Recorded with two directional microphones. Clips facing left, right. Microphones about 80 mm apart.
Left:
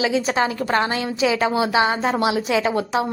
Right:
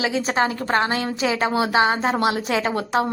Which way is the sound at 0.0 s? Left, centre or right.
Right.